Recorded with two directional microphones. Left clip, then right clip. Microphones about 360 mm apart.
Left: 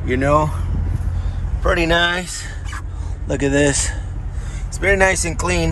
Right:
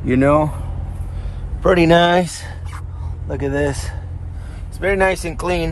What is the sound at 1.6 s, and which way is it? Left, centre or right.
Speech, centre.